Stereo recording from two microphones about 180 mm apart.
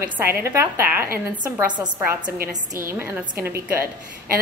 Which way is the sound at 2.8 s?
15° right (ahead or behind).